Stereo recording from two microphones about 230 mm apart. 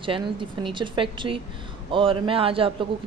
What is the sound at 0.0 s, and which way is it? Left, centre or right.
A woman's voice, right.